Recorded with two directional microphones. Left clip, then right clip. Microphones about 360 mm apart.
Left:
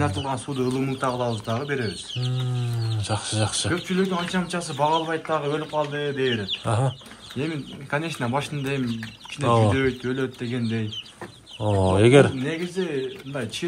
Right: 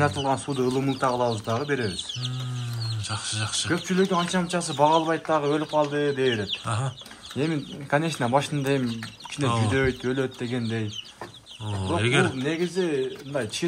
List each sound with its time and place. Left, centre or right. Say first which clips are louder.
0.0 s speech: right 3 dB; right
3.1 s speech: left 4 dB; centre
3.7 s speech: right 5 dB; right
6.6 s speech: left 5 dB; centre
7.3 s speech: right 2 dB; right
9.4 s speech: left 6 dB; centre
9.8 s speech: even; right
11.6 s speech: left 8 dB; centre
12.4 s speech: right 2 dB; right